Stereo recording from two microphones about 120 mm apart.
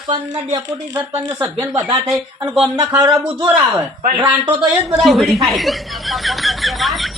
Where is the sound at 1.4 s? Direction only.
25° right (ahead or behind).